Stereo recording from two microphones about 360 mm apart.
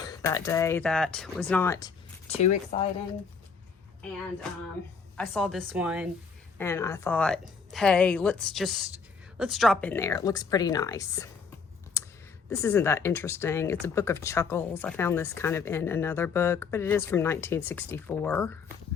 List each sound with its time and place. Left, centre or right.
0.0 s speech: centre
5.1 s a woman's voice: centre
6.6 s a woman's voice: centre
12.5 s speech: centre